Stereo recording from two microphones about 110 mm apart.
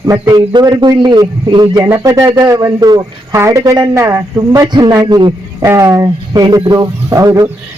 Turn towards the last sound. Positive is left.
turn(degrees=-30)  # may be behind; listen again after turning